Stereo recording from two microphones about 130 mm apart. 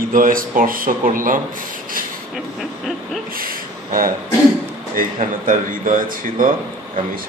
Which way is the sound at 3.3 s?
90° right.